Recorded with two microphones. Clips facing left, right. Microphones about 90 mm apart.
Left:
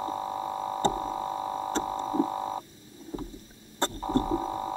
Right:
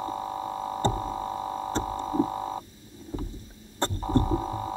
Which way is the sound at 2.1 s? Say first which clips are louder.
Right 1 dB; centre (ahead or behind).